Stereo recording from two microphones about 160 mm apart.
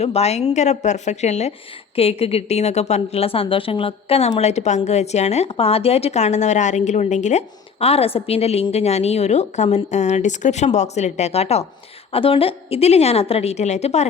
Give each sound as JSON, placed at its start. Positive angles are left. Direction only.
{"t": 0.0, "sound": "a woman's voice", "side_deg": 40}